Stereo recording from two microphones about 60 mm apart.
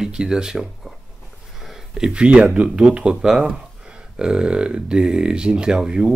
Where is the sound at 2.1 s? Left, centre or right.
Centre.